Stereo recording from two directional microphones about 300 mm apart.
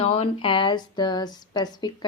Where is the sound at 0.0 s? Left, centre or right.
Centre.